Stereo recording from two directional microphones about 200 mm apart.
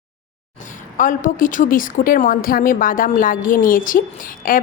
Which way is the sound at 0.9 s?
40° left (ahead or behind).